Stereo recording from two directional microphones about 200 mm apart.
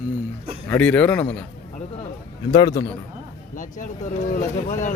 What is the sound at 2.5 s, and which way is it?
Speech, 20° left (ahead or behind).